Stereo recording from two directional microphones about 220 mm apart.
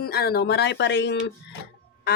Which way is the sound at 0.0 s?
45° left (ahead or behind).